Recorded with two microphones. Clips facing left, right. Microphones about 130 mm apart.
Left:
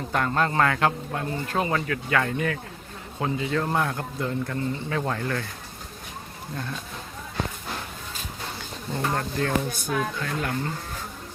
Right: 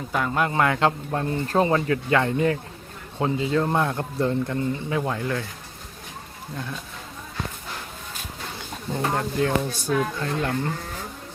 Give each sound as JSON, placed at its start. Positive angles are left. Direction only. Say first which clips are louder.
{"t": 0.1, "sound": "a man's voice", "louder": "even", "side_deg": -5}
{"t": 9.0, "sound": "a man's voice", "louder": "right 3 dB", "side_deg": -20}
{"t": 9.8, "sound": "a man's voice", "louder": "right 3 dB", "side_deg": -30}